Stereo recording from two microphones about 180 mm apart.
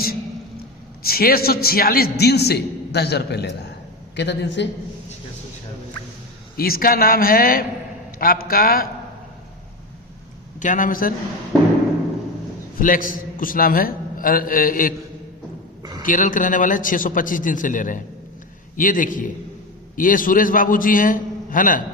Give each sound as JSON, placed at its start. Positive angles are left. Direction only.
{"t": 1.0, "sound": "a man's voice", "side_deg": 55}
{"t": 6.6, "sound": "a man's voice", "side_deg": 55}
{"t": 10.6, "sound": "a man's voice", "side_deg": 45}
{"t": 12.8, "sound": "a man's voice", "side_deg": 50}
{"t": 15.8, "sound": "a sound", "side_deg": -25}
{"t": 16.0, "sound": "a man's voice", "side_deg": 45}